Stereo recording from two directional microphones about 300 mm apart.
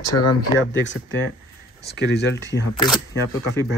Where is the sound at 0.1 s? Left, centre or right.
Left.